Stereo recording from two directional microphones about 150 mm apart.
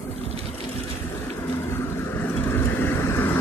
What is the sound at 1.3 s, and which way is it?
Vehicle, 15° left (ahead or behind).